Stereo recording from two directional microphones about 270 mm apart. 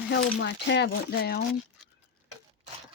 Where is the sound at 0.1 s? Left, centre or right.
Left.